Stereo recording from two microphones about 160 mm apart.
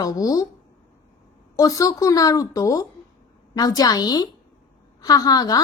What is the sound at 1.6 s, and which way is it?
A woman's voice, 20° left (ahead or behind).